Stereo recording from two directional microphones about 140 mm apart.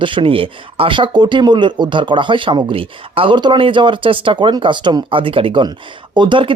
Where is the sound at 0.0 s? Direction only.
40° right (ahead or behind).